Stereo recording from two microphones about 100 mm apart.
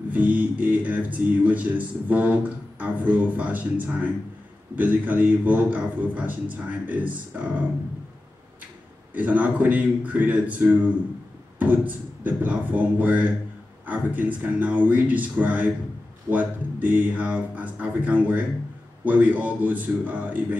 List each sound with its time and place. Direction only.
0.1 s speech: 15° right (ahead or behind)
9.1 s speech: 15° right (ahead or behind)
12.2 s speech: 15° right (ahead or behind)